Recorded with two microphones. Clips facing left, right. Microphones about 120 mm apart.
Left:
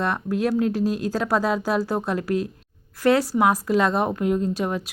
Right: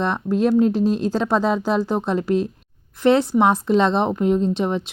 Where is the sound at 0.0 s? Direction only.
20° right (ahead or behind).